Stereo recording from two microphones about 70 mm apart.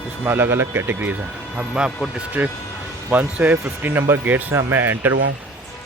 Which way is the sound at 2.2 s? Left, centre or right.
Right.